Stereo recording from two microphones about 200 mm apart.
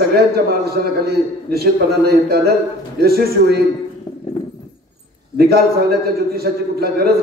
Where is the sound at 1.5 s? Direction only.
50° right (ahead or behind).